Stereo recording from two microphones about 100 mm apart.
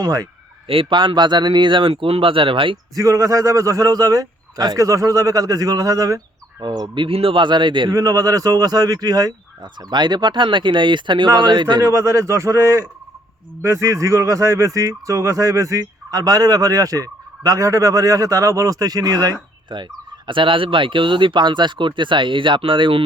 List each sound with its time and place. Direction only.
0.0 s speech: 40° right (ahead or behind)
0.7 s speech: 60° right (ahead or behind)
2.9 s speech: 35° right (ahead or behind)
6.6 s speech: 45° right (ahead or behind)
7.9 s speech: 40° right (ahead or behind)
11.8 s a man's voice: 30° right (ahead or behind); by 23.0 s 60° right (ahead or behind)